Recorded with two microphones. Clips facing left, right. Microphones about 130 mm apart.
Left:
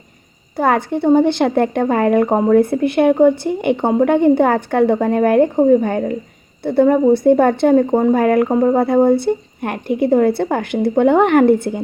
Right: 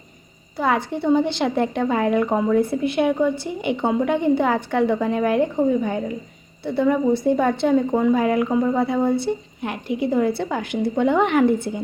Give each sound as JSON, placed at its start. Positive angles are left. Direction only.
{"t": 0.5, "sound": "a woman's voice", "side_deg": 50}